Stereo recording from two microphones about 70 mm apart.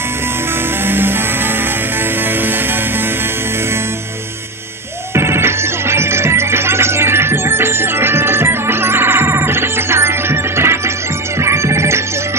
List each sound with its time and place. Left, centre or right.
0.8 s music: right
5.1 s music: right